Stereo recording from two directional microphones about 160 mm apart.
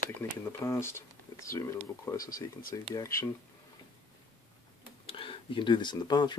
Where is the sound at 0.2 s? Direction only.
15° left (ahead or behind).